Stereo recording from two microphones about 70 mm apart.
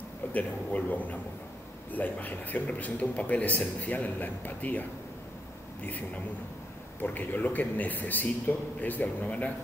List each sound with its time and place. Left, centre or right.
0.3 s a man's voice: left